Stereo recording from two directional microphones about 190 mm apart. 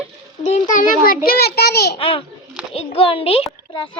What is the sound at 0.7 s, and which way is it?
A child's voice, 45° left (ahead or behind).